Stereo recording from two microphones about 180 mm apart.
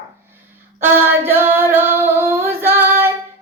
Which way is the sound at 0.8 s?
10° right (ahead or behind).